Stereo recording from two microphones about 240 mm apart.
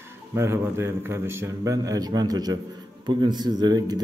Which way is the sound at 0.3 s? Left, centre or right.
Centre.